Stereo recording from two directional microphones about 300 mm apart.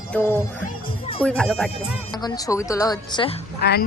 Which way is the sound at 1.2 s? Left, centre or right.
Centre.